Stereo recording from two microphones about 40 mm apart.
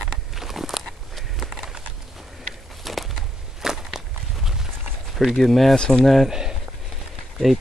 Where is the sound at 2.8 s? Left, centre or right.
Centre.